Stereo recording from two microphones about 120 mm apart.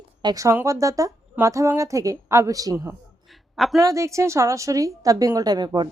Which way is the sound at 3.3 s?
Centre (ahead or behind).